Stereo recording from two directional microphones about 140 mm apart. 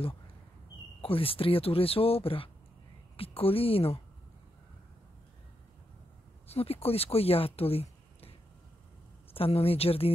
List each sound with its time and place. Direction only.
1.0 s speech: 40° left (ahead or behind)
6.4 s speech: 45° left (ahead or behind)